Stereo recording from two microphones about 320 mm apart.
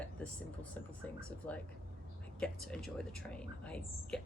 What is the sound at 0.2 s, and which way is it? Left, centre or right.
A woman's voice, centre.